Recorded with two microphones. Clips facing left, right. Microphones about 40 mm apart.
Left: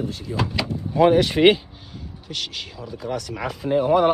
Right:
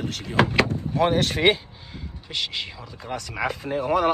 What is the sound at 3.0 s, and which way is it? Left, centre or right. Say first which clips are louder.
Speech: left 1 dB; right.